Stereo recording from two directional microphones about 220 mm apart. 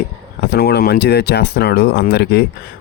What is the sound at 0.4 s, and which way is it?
Speech, 45° left (ahead or behind).